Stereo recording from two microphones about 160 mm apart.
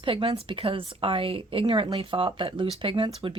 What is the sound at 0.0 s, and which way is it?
A woman's voice, 35° right (ahead or behind).